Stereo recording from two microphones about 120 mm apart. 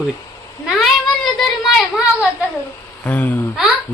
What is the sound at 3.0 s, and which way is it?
Speech, 15° left (ahead or behind).